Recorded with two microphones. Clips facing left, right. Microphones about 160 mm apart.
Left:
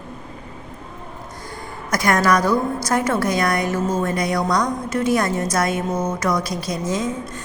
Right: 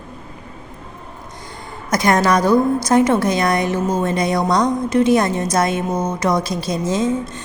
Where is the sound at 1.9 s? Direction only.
20° right (ahead or behind).